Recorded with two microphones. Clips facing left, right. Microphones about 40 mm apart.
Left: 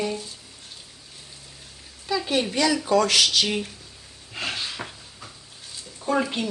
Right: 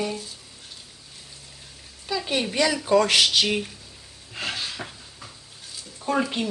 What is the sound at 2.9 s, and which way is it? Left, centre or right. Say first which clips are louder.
Speech: right 2 dB; centre.